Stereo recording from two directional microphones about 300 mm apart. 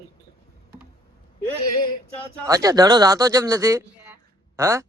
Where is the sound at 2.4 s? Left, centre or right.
Centre.